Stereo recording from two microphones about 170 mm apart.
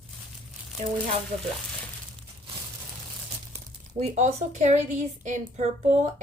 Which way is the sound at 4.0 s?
40° right (ahead or behind).